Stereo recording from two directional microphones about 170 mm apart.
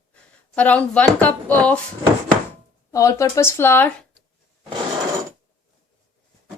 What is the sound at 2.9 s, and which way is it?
Speech, 20° left (ahead or behind).